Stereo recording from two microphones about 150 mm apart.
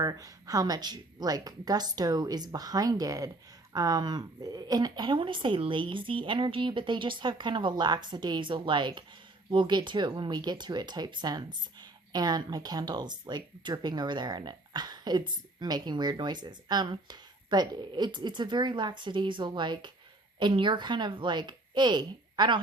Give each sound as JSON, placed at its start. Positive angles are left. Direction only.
{"t": 0.0, "sound": "a woman's voice", "side_deg": -25}